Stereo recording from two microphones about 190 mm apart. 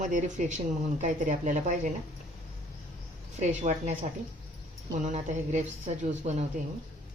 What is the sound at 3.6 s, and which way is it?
Speech, 40° right (ahead or behind).